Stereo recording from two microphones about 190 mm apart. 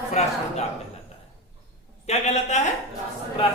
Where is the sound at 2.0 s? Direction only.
35° left (ahead or behind).